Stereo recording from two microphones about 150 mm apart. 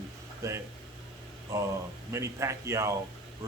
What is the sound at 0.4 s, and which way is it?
Speech, 20° right (ahead or behind).